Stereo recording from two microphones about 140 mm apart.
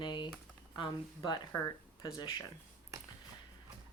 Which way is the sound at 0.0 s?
35° left (ahead or behind).